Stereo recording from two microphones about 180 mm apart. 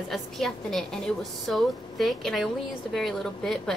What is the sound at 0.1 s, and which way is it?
A woman's voice, centre (ahead or behind).